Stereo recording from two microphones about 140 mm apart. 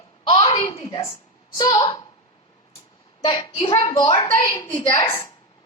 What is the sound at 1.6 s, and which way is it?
Speech, 30° left (ahead or behind).